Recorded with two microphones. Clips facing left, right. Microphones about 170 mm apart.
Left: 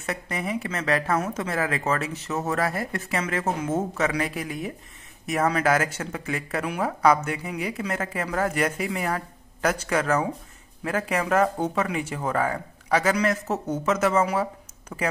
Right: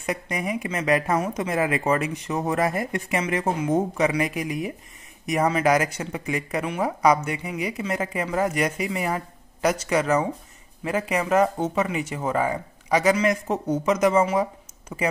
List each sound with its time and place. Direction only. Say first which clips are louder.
0.0 s a man's voice: right 2 dB; 15° right (ahead or behind)